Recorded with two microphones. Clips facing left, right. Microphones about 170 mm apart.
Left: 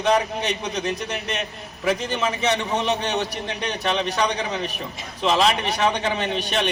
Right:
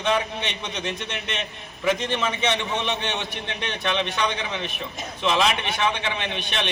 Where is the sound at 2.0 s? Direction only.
Centre (ahead or behind).